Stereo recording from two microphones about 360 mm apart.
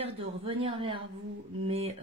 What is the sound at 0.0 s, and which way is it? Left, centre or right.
Speech, centre.